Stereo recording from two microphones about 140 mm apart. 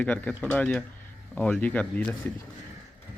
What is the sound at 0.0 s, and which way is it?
Speech, 10° left (ahead or behind).